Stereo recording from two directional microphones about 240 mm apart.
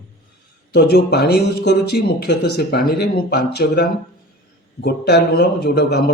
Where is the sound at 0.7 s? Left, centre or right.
Left.